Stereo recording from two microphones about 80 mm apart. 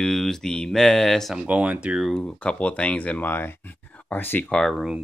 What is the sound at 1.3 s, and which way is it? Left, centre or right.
Speech, centre.